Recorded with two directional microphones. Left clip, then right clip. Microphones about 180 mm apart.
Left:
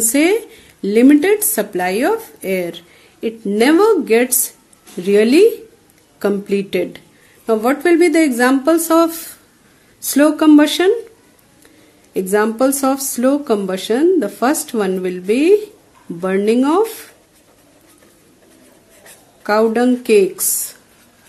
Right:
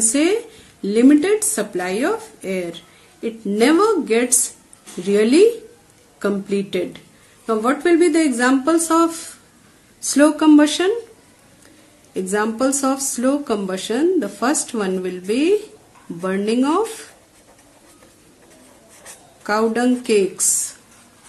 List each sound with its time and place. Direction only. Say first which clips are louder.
0.0 s speech: left 4 dB; 40° left (ahead or behind)
12.1 s speech: left 5 dB; 40° left (ahead or behind)
19.4 s speech: left 4 dB; 30° left (ahead or behind)